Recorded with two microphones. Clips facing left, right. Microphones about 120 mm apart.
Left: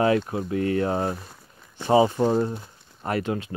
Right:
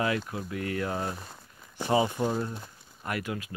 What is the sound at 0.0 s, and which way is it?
Speech, 30° left (ahead or behind).